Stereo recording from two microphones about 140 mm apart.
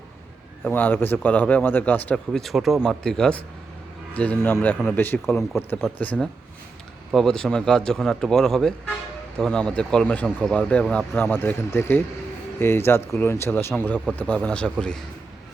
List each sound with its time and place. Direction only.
0.6 s speech: 15° left (ahead or behind)